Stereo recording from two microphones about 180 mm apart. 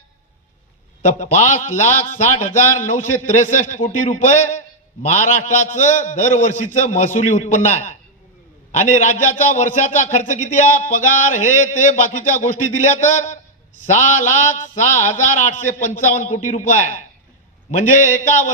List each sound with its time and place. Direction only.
1.0 s a man's voice: 40° left (ahead or behind)
14.9 s a man's voice: 45° left (ahead or behind)